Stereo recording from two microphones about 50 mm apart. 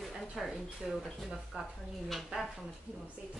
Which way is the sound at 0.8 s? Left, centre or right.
Centre.